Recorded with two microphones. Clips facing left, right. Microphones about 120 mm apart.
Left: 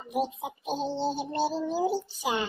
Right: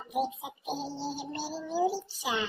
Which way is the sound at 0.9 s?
25° left (ahead or behind).